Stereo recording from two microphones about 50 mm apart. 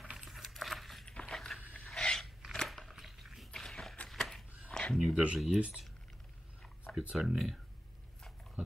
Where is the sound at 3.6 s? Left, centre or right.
Centre.